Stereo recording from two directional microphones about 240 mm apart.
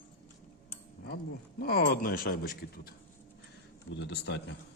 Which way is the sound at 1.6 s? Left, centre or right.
Left.